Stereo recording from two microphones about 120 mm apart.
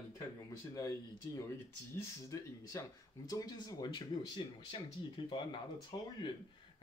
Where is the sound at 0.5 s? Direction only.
30° left (ahead or behind).